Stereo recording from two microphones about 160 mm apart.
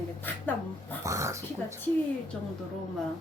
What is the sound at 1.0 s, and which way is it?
Speech, 20° right (ahead or behind).